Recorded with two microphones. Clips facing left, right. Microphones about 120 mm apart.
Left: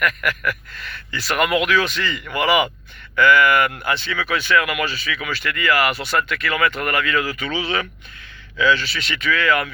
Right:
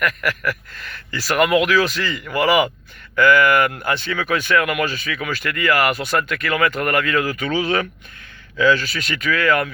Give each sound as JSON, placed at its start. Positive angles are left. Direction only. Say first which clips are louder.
{"t": 0.0, "sound": "speech", "louder": "even", "side_deg": -35}